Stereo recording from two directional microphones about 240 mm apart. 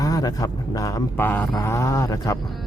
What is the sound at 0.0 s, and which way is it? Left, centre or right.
Speech, centre.